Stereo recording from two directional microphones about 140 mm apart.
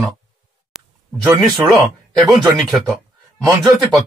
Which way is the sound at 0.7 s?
5° right (ahead or behind).